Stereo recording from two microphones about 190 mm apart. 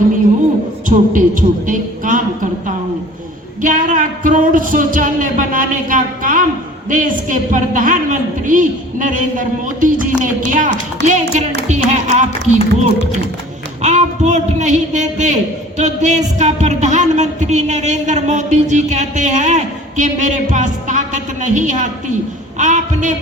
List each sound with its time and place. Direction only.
0.9 s a woman's voice: 45° right (ahead or behind)
13.8 s speech: 40° right (ahead or behind)